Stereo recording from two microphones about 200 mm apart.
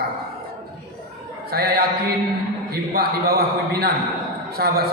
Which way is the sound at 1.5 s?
50° right (ahead or behind).